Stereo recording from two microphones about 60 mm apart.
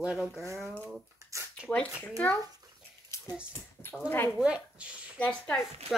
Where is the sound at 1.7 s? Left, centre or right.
Left.